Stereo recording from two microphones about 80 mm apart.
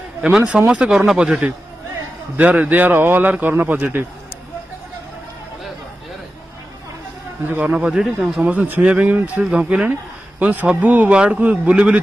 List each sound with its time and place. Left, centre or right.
0.2 s a man's voice: centre
7.6 s a man's voice: centre
8.4 s a man's voice: right